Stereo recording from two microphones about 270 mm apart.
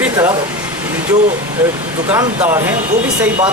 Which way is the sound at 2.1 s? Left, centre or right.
Centre.